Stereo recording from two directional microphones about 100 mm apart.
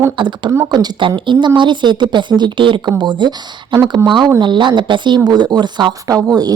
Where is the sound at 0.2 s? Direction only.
50° right (ahead or behind).